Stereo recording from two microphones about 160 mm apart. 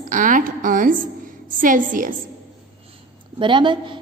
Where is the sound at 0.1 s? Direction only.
55° right (ahead or behind).